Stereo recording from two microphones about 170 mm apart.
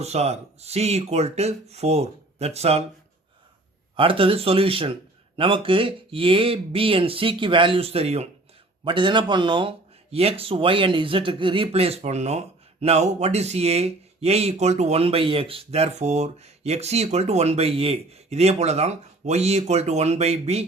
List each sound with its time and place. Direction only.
0.0 s speech: 40° right (ahead or behind)
3.9 s speech: 30° right (ahead or behind)